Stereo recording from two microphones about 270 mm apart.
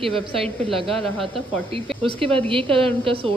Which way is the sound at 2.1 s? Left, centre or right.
Centre.